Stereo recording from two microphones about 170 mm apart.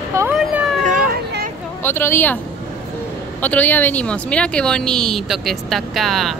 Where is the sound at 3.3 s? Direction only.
10° left (ahead or behind).